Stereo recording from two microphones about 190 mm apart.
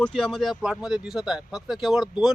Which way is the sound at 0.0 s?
Centre (ahead or behind).